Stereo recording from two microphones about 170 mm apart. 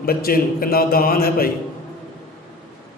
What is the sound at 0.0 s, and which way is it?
A man's voice, 60° left (ahead or behind).